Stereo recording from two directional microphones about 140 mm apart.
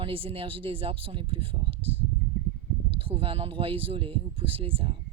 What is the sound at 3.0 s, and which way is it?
Speech, 40° right (ahead or behind).